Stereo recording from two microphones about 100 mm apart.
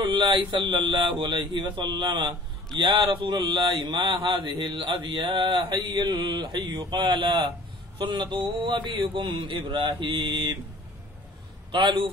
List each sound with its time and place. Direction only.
0.0 s a man's voice: 55° right (ahead or behind)
11.7 s a man's voice: 60° right (ahead or behind)